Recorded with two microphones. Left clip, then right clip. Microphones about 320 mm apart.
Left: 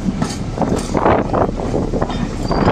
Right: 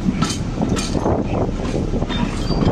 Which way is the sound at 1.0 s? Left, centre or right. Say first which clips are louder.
Left 8 dB; left.